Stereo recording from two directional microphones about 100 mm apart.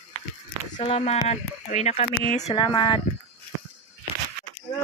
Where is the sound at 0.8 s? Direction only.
85° left; by 2.9 s 55° left (ahead or behind).